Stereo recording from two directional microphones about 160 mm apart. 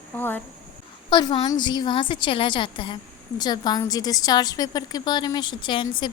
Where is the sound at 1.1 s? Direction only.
30° left (ahead or behind).